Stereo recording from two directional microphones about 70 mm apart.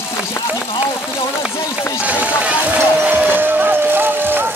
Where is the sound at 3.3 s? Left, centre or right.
Right.